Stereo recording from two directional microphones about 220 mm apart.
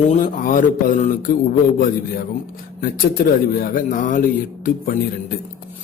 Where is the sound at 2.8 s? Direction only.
40° left (ahead or behind).